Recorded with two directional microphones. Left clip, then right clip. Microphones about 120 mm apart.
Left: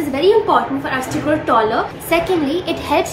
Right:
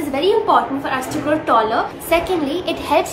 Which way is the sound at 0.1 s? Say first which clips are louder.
Left 1 dB; 30° right (ahead or behind).